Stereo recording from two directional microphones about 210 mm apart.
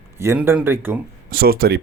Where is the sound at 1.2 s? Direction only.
45° right (ahead or behind).